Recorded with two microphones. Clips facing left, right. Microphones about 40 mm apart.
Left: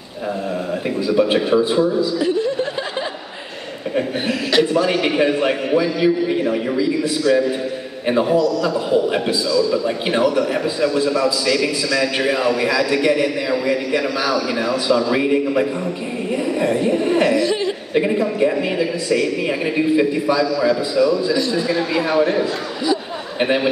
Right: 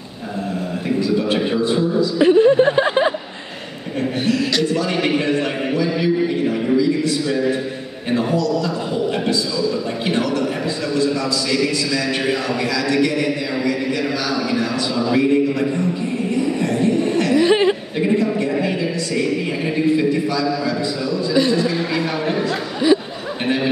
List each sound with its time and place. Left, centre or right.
0.8 s a man's voice: centre
2.1 s speech: right
4.3 s a man's voice: centre
12.2 s speech: centre
12.6 s a man's voice: centre
21.3 s a man's voice: right
21.5 s speech: centre
23.4 s a man's voice: centre